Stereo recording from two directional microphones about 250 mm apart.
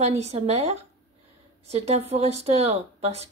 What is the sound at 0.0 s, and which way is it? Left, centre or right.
Speech, right.